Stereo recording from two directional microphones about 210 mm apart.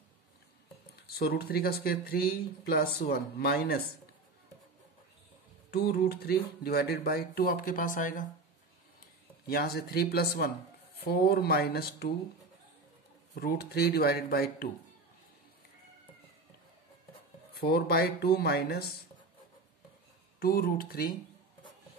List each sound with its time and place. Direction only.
1.1 s speech: 50° left (ahead or behind)
5.7 s speech: 50° left (ahead or behind)
9.5 s speech: 50° left (ahead or behind)
13.4 s speech: 50° left (ahead or behind)
17.6 s speech: 50° left (ahead or behind)
20.3 s speech: 45° left (ahead or behind)